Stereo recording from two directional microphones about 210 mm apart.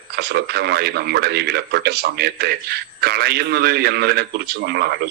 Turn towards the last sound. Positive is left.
turn(degrees=-50)  # may be behind; listen again after turning